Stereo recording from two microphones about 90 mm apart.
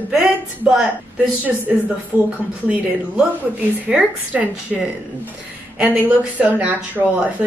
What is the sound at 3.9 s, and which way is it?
Speech, 15° right (ahead or behind).